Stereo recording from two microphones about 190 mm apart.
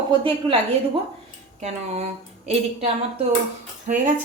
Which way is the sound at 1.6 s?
35° right (ahead or behind).